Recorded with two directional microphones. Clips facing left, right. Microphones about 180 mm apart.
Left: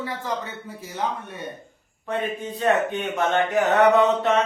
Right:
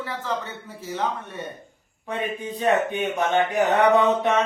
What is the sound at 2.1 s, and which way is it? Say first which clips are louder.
Speech: left 1 dB; 15° right (ahead or behind).